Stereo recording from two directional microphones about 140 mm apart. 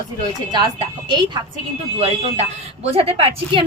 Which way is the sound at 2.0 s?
45° right (ahead or behind).